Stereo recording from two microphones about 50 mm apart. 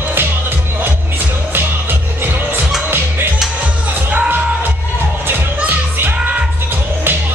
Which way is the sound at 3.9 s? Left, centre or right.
Right.